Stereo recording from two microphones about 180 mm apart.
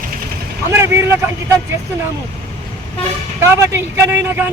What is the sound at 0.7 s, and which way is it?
Speech, 15° right (ahead or behind).